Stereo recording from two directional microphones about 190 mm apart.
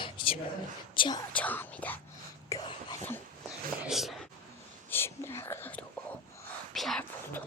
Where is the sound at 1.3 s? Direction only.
10° left (ahead or behind).